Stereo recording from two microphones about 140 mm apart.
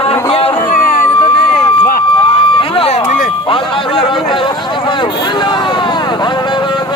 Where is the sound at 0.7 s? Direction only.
80° left.